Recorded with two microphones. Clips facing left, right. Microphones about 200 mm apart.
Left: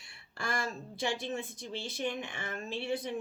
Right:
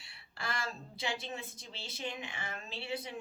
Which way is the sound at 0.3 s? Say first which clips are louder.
Left 4 dB; 50° left (ahead or behind).